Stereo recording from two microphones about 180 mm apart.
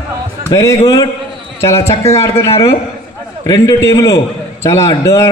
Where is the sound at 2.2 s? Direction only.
15° left (ahead or behind).